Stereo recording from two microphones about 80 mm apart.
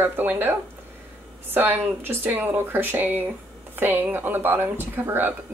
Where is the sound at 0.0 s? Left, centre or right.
Right.